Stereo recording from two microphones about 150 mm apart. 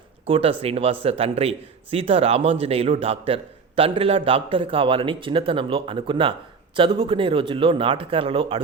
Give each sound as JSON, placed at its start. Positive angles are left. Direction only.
{"t": 0.3, "sound": "a man's voice", "side_deg": -40}